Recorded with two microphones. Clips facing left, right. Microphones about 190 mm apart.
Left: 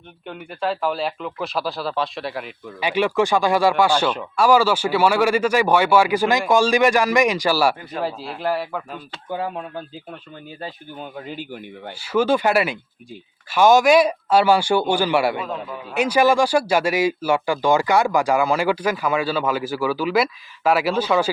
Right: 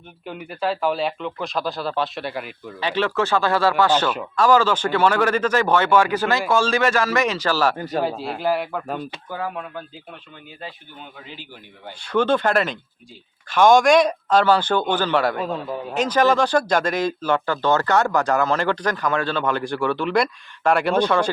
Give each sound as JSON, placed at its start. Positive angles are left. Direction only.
{"t": 0.3, "sound": "speech", "side_deg": 0}
{"t": 2.8, "sound": "speech", "side_deg": 15}
{"t": 7.8, "sound": "a man's voice", "side_deg": -40}
{"t": 8.4, "sound": "speech", "side_deg": 0}
{"t": 9.3, "sound": "speech", "side_deg": 25}
{"t": 10.6, "sound": "speech", "side_deg": 45}
{"t": 11.9, "sound": "speech", "side_deg": 5}
{"t": 15.4, "sound": "a man's voice", "side_deg": -30}
{"t": 16.0, "sound": "speech", "side_deg": 10}